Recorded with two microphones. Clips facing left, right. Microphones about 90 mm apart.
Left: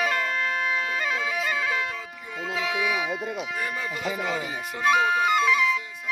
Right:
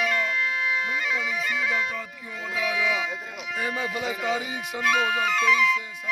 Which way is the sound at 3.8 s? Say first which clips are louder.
Right 3 dB; 5° right (ahead or behind).